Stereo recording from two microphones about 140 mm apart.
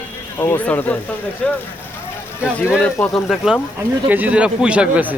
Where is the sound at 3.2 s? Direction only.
5° right (ahead or behind).